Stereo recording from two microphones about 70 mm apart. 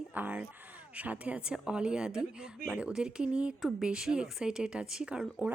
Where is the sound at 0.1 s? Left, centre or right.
Right.